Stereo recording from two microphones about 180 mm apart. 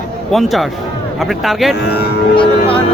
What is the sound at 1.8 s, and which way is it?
Music, 65° left (ahead or behind).